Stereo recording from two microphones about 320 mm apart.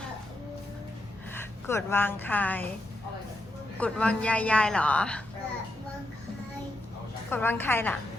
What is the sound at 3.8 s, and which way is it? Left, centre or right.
A man's voice, centre.